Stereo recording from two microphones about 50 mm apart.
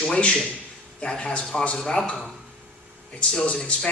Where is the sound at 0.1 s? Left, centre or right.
Left.